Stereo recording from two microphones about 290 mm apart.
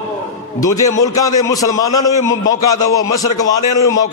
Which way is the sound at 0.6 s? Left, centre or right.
Centre.